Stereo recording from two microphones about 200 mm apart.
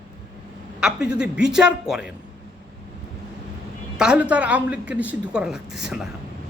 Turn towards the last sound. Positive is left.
turn(degrees=0)  # may be behind; listen again after turning